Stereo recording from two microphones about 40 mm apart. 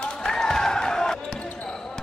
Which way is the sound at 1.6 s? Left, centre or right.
Centre.